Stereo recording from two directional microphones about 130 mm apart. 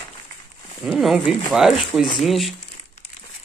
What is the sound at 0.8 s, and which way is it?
Speech, centre (ahead or behind).